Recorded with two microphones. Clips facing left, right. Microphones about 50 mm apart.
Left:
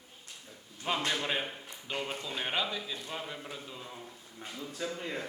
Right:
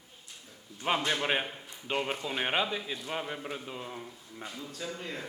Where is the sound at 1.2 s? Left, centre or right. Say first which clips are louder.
Right 3 dB; right.